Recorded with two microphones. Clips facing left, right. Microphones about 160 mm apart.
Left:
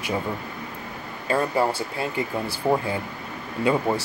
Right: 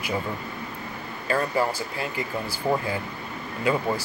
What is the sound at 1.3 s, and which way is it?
Speech, 30° left (ahead or behind).